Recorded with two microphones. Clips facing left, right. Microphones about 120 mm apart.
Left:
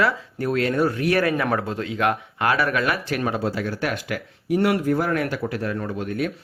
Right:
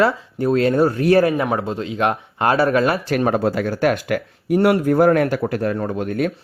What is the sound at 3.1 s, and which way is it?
Speech, 45° right (ahead or behind).